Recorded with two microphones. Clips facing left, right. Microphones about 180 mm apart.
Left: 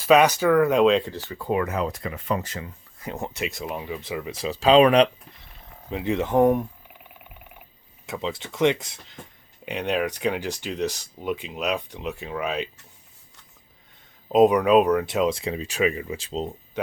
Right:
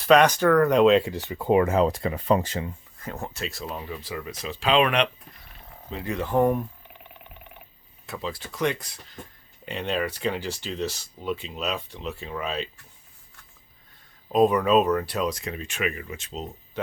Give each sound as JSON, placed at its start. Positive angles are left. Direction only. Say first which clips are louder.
{"t": 0.0, "sound": "speech", "louder": "even", "side_deg": 5}
{"t": 1.1, "sound": "speech", "louder": "right 4 dB", "side_deg": -20}
{"t": 3.0, "sound": "speech", "louder": "left 3 dB", "side_deg": 15}
{"t": 4.4, "sound": "speech", "louder": "left 6 dB", "side_deg": 35}
{"t": 6.1, "sound": "speech", "louder": "left 3 dB", "side_deg": 20}
{"t": 8.0, "sound": "speech", "louder": "left 3 dB", "side_deg": 20}
{"t": 14.3, "sound": "speech", "louder": "left 3 dB", "side_deg": 15}